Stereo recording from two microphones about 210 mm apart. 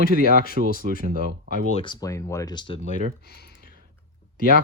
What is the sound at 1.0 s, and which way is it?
Speech, 40° right (ahead or behind).